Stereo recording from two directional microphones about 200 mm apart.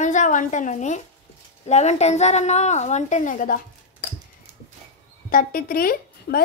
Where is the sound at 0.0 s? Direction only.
40° left (ahead or behind).